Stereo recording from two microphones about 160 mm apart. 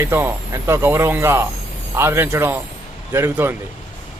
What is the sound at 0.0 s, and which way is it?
Speech, 15° right (ahead or behind).